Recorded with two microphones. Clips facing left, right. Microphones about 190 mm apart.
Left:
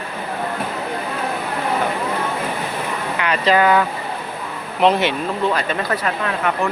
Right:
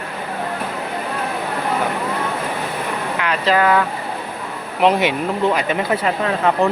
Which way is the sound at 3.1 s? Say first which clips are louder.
Left 1 dB; centre (ahead or behind).